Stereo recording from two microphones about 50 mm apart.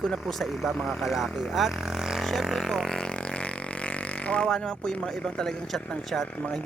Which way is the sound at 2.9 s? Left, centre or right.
Centre.